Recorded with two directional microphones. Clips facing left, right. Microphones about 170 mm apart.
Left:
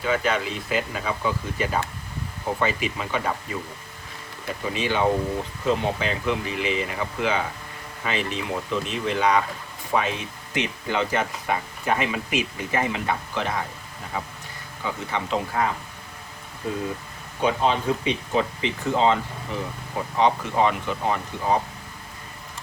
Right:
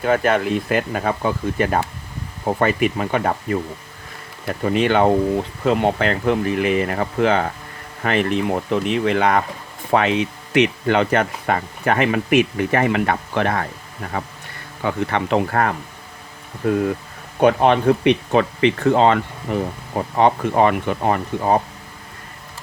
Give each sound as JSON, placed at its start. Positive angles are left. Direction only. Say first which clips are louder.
{"t": 0.0, "sound": "speech", "louder": "right 6 dB", "side_deg": -55}
{"t": 4.6, "sound": "speech", "louder": "right 7 dB", "side_deg": -60}
{"t": 9.9, "sound": "speech", "louder": "right 7 dB", "side_deg": -70}